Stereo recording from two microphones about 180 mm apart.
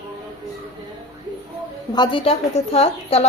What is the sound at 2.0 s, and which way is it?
A woman's voice, 30° left (ahead or behind).